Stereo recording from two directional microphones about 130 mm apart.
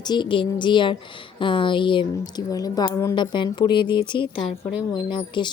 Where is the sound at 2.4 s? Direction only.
30° left (ahead or behind).